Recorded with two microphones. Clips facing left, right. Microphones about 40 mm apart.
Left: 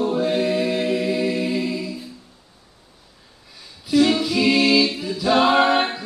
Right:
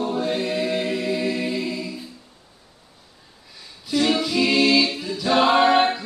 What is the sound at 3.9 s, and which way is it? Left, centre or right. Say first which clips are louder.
Music: left 3 dB; centre.